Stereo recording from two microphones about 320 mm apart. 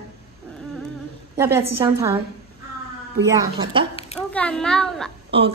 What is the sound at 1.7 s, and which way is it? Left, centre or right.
Speech, centre.